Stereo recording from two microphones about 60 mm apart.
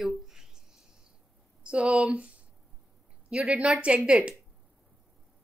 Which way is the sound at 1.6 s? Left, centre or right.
Centre.